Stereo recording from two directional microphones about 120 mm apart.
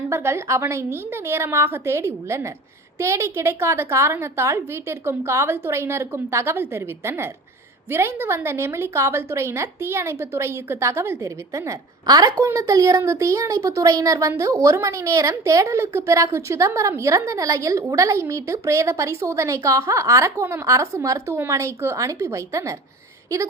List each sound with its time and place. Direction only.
0.1 s a woman's voice: 20° right (ahead or behind)